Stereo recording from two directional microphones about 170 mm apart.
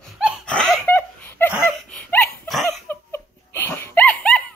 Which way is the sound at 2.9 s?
15° left (ahead or behind).